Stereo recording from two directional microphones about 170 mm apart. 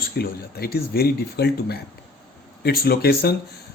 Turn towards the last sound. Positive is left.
turn(degrees=65)  # may be behind; listen again after turning